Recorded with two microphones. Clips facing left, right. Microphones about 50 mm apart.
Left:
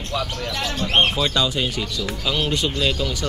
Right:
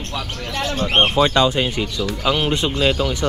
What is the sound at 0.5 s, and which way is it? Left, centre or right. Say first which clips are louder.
A man's voice: right 3 dB; right.